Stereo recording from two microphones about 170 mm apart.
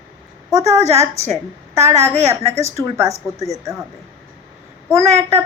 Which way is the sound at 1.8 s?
15° right (ahead or behind).